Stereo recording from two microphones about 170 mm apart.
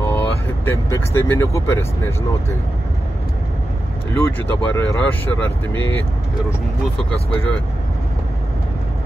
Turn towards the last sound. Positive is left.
turn(degrees=5)  # may be behind; listen again after turning